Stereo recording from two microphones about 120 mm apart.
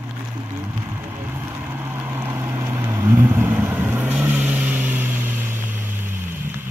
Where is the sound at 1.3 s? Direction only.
20° right (ahead or behind).